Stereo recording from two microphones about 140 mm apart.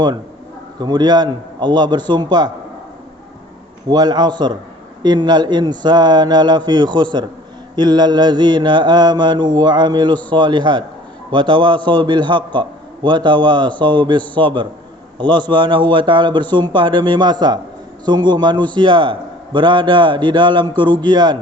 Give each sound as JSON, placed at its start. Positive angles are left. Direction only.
{"t": 0.8, "sound": "a man's voice", "side_deg": -30}
{"t": 3.8, "sound": "a man's voice", "side_deg": -30}